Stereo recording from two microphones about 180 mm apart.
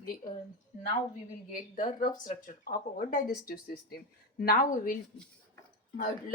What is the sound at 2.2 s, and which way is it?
Speech, 50° left (ahead or behind).